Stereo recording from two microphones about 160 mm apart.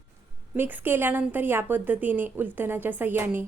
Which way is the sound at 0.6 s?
10° right (ahead or behind).